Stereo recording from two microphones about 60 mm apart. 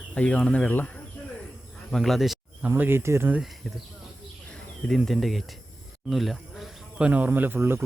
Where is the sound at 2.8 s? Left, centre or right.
Right.